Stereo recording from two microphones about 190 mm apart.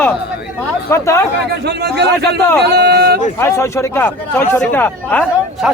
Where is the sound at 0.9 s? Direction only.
15° left (ahead or behind).